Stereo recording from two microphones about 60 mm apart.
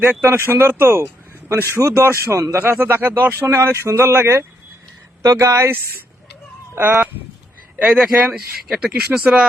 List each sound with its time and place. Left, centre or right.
0.2 s speech: right
2.6 s speech: right
3.4 s speech: right
6.7 s speech: right
7.8 s speech: centre